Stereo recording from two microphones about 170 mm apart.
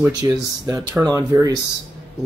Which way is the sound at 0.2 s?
20° right (ahead or behind).